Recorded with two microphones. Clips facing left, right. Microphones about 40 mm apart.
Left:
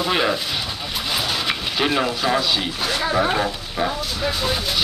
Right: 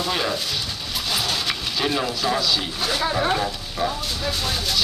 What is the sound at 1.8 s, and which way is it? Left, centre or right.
Speech, left.